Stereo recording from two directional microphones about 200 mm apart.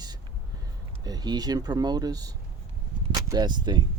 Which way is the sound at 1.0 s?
20° right (ahead or behind).